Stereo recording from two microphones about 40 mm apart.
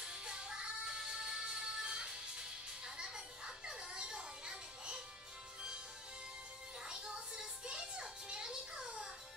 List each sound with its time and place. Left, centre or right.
0.0 s music: centre
6.9 s music: centre